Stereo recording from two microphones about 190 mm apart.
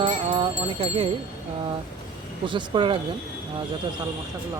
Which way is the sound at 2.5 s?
25° right (ahead or behind).